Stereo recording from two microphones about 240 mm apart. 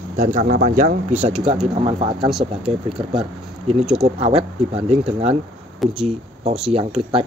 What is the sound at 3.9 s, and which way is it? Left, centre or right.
Speech, right.